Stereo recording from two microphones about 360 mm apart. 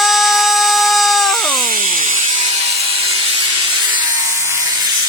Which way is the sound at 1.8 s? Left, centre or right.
Right.